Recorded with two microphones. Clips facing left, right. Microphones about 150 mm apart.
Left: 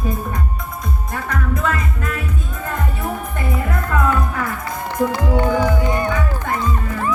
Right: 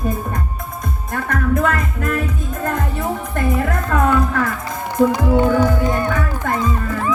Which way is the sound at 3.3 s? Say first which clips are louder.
Right 4 dB; 45° right (ahead or behind).